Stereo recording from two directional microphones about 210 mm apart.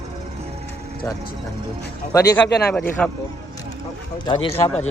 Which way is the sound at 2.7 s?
5° left (ahead or behind).